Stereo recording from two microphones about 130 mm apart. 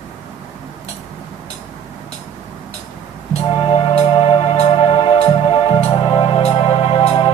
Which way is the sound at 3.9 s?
50° left (ahead or behind).